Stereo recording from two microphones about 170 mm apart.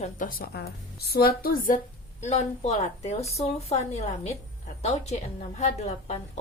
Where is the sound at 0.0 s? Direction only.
55° left (ahead or behind).